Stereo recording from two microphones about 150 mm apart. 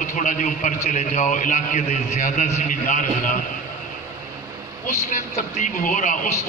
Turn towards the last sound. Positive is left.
turn(degrees=55)  # may be behind; listen again after turning